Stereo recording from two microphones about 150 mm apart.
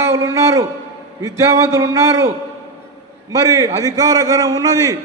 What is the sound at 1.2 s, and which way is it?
A man's voice, 20° right (ahead or behind).